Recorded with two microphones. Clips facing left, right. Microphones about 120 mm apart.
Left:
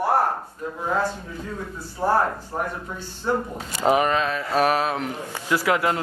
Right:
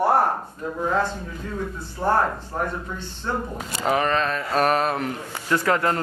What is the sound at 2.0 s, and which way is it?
A man's voice, 15° left (ahead or behind).